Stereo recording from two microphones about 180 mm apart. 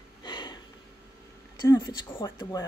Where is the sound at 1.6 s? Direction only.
25° left (ahead or behind).